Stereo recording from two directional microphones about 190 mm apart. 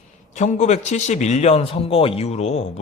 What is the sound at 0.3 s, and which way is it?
A man's voice, 40° left (ahead or behind).